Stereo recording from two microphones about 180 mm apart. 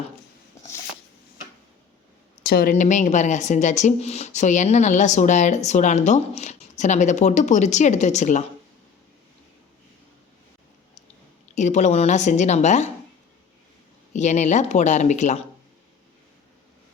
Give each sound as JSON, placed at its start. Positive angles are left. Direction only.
{"t": 2.4, "sound": "speech", "side_deg": 60}
{"t": 11.5, "sound": "speech", "side_deg": 40}
{"t": 14.1, "sound": "speech", "side_deg": 40}